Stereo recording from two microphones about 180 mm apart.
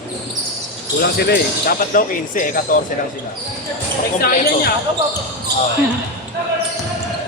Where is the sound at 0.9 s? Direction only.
60° left (ahead or behind).